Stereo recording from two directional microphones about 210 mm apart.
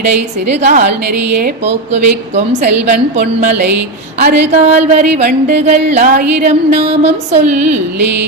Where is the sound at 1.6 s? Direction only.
30° right (ahead or behind).